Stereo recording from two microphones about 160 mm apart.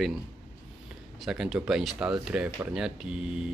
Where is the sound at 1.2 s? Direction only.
5° right (ahead or behind).